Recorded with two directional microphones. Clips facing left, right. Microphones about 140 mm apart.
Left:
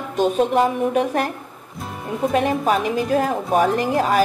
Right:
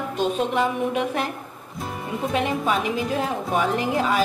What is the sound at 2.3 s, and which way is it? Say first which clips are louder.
A woman's voice: left 4 dB; 45° left (ahead or behind).